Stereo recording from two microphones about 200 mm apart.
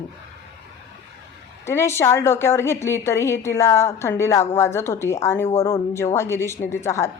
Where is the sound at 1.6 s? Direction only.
15° left (ahead or behind).